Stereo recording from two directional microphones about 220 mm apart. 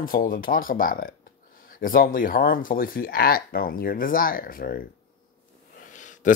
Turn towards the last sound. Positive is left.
turn(degrees=35)  # may be behind; listen again after turning